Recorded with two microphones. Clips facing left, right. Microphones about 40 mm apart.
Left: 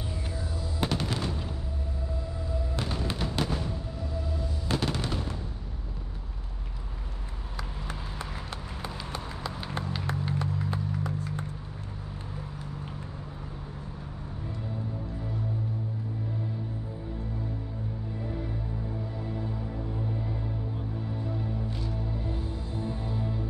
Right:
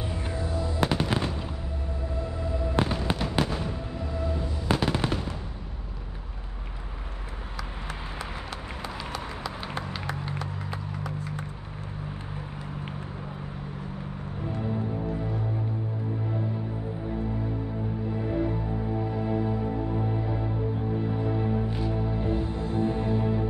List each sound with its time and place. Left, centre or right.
0.1 s music: right
0.8 s fireworks: right
2.2 s fireworks: right
3.6 s fireworks: right
4.1 s a sound: right
4.6 s fireworks: centre
4.9 s fireworks: right
14.5 s music: right
18.1 s music: right
21.6 s music: right